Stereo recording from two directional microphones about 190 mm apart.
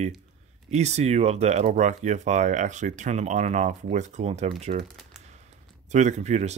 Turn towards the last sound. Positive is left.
turn(degrees=-35)  # may be behind; listen again after turning